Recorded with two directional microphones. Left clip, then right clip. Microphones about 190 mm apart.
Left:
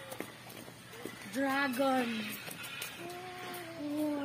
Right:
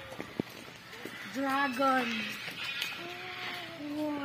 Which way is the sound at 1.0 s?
Centre (ahead or behind).